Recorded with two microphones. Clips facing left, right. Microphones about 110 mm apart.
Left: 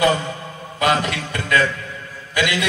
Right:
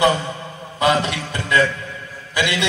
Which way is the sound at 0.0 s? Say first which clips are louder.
Right 1 dB; 20° right (ahead or behind).